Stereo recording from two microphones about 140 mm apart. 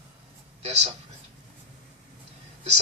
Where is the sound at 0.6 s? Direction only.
50° right (ahead or behind).